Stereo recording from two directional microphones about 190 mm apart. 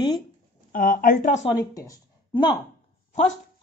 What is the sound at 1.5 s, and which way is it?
Speech, 20° left (ahead or behind).